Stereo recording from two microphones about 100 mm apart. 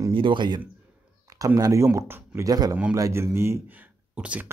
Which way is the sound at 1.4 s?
35° right (ahead or behind).